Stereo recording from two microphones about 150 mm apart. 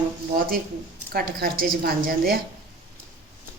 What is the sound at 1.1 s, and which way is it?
A woman's voice, 90° right.